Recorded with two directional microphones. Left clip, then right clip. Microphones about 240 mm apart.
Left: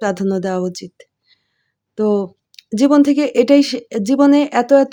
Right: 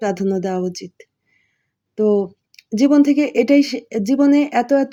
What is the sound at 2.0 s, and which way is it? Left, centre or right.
A woman's voice, left.